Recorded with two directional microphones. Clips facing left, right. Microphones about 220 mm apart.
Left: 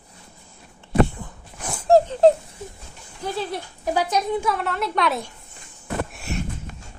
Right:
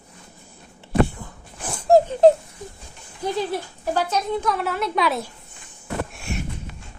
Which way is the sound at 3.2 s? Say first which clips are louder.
Right 3 dB; 10° right (ahead or behind).